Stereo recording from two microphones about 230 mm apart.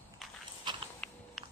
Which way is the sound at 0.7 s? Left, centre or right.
Centre.